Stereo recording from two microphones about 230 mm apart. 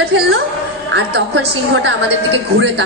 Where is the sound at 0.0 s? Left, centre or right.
Right.